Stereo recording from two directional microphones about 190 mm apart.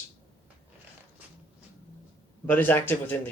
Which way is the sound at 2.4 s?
10° left (ahead or behind).